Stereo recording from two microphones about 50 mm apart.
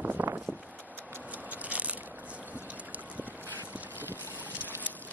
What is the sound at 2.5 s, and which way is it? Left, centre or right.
Boat, right.